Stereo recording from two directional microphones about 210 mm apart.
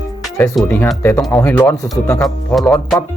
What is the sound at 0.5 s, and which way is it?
Speech, 5° left (ahead or behind).